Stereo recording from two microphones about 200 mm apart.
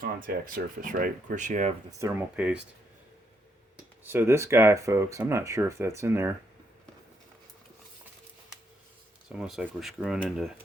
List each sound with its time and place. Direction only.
0.0 s speech: 45° right (ahead or behind)
1.9 s speech: 15° right (ahead or behind)
4.0 s speech: 10° right (ahead or behind)
9.3 s speech: centre (ahead or behind)